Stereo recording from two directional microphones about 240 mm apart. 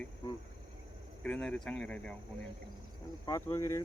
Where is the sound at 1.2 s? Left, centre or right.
Centre.